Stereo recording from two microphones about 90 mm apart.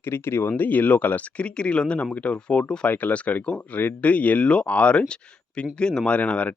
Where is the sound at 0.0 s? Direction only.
25° left (ahead or behind).